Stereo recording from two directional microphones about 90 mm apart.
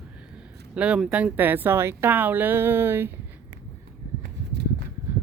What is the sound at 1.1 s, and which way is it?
Speech, 15° right (ahead or behind).